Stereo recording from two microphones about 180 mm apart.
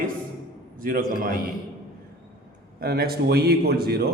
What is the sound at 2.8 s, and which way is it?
Speech, 60° right (ahead or behind).